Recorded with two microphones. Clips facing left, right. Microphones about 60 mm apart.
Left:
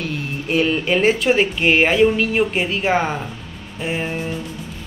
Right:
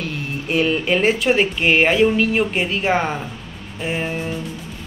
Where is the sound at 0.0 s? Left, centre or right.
Centre.